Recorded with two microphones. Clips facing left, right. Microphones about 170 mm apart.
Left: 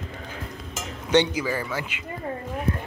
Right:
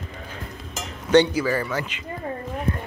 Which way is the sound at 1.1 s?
10° left (ahead or behind).